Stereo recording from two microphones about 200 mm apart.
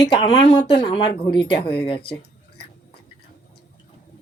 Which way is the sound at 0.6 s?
25° left (ahead or behind).